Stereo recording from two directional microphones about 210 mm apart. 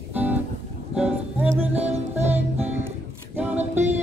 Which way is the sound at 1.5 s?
30° right (ahead or behind).